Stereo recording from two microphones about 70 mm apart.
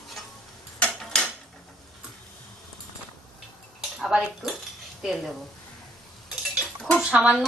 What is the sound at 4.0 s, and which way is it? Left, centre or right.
Speech, centre.